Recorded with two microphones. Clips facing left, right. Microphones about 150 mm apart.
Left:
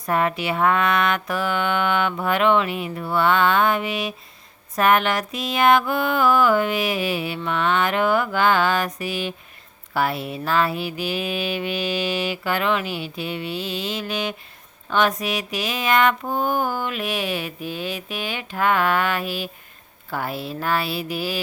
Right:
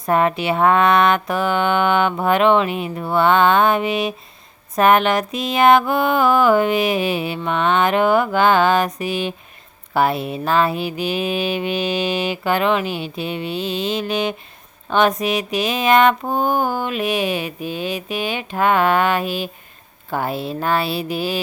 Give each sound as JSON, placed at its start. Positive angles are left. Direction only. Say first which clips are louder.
{"t": 0.0, "sound": "mantra", "louder": "right 4 dB", "side_deg": -25}